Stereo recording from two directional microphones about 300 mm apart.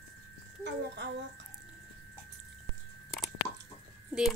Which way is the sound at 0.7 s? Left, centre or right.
Right.